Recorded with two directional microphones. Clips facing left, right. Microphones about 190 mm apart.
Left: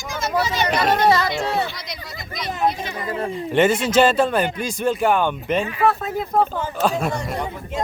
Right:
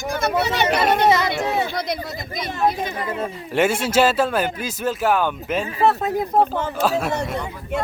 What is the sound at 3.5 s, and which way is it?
A man's voice, 10° right (ahead or behind).